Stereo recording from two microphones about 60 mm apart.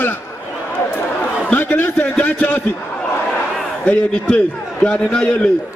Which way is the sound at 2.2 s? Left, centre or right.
Left.